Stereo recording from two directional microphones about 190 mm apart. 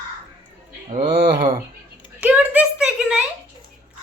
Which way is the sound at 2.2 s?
5° right (ahead or behind).